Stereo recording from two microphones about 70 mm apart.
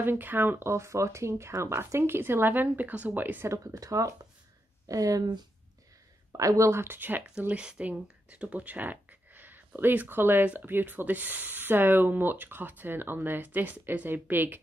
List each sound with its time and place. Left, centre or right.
0.0 s speech: right
3.4 s speech: right
6.3 s speech: right
7.2 s speech: centre